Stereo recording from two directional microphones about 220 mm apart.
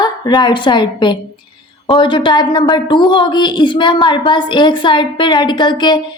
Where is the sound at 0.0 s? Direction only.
20° left (ahead or behind).